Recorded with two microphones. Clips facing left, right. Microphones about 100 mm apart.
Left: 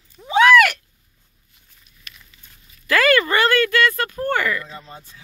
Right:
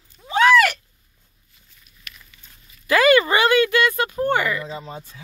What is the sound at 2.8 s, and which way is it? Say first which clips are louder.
Speech: right 2 dB; 5° right (ahead or behind).